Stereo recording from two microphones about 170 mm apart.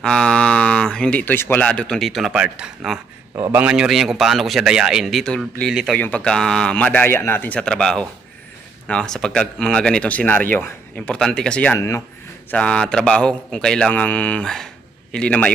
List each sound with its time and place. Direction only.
0.0 s speech: 5° left (ahead or behind)
3.3 s a man's voice: 20° right (ahead or behind)
3.6 s a man's voice: 5° right (ahead or behind)